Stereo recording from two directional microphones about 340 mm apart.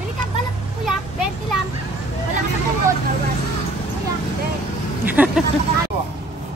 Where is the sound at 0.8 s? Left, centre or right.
Centre.